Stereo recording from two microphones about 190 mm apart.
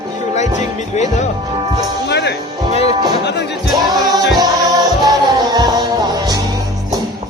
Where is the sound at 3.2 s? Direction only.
65° left (ahead or behind).